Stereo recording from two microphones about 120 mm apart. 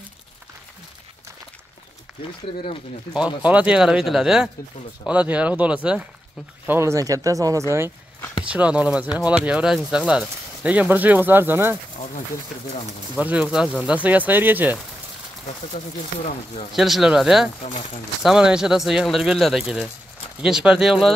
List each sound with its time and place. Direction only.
3.4 s speech: 10° right (ahead or behind)
6.6 s speech: 20° right (ahead or behind)
8.5 s speech: 10° right (ahead or behind)
13.2 s speech: 10° right (ahead or behind)
16.7 s speech: centre (ahead or behind)